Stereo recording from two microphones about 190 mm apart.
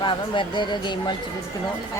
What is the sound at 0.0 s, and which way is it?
Speech, 25° left (ahead or behind).